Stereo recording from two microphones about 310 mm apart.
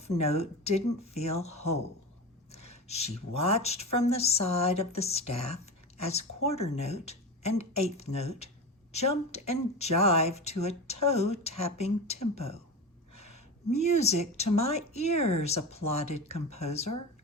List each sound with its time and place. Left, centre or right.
0.0 s speech: left
2.5 s a sound: centre
3.3 s a woman's voice: centre